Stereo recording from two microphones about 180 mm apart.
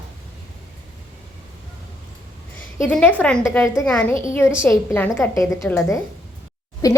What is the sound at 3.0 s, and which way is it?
A woman's voice, 10° left (ahead or behind).